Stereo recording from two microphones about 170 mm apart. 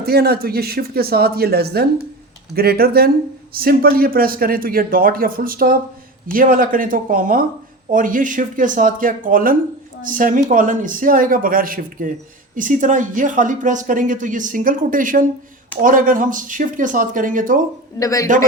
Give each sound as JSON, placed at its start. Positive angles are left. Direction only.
{"t": 0.0, "sound": "speech", "side_deg": -70}
{"t": 18.0, "sound": "a man's voice", "side_deg": 20}